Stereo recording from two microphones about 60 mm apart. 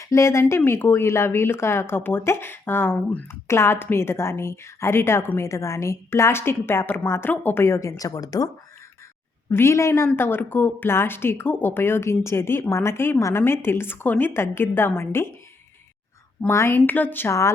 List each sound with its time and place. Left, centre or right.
0.0 s speech: left
5.4 s speech: left
7.6 s a woman's voice: left
9.5 s speech: left
10.2 s speech: left
16.5 s speech: left
16.7 s speech: left